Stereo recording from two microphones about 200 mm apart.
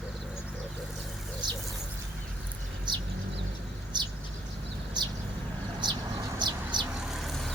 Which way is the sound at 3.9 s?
20° right (ahead or behind).